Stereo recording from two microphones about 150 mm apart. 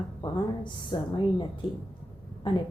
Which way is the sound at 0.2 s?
30° left (ahead or behind).